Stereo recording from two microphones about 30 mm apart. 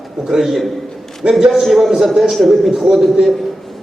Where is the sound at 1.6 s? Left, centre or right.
Centre.